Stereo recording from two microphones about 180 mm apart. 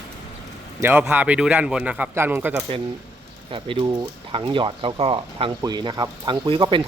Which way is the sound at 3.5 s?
30° right (ahead or behind).